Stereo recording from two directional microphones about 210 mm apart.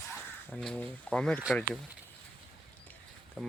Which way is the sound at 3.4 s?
Centre (ahead or behind).